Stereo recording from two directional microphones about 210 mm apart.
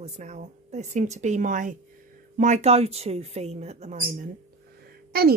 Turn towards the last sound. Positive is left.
turn(degrees=-45)  # may be behind; listen again after turning